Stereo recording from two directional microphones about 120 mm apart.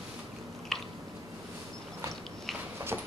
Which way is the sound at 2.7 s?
20° right (ahead or behind).